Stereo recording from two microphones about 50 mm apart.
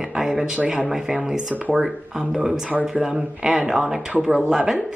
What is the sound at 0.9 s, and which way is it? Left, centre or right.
A woman's voice, centre.